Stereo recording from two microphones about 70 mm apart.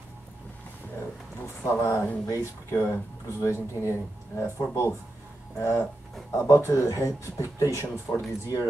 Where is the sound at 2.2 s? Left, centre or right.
Left.